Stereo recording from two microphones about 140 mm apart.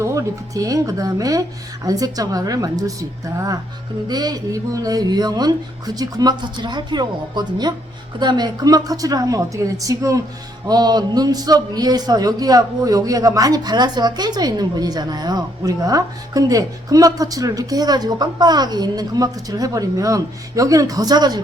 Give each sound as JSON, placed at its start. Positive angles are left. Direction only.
{"t": 0.0, "sound": "a man's voice", "side_deg": -20}